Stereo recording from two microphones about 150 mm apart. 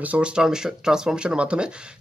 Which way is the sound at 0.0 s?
10° right (ahead or behind).